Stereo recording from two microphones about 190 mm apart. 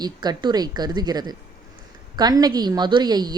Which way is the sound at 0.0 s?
20° right (ahead or behind).